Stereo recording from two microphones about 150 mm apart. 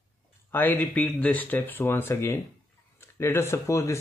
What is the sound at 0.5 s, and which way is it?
Speech, 10° left (ahead or behind).